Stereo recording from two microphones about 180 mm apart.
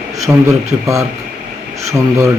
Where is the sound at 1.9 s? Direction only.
15° right (ahead or behind).